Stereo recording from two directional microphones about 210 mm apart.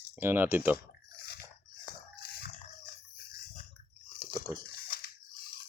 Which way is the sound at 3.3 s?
35° left (ahead or behind).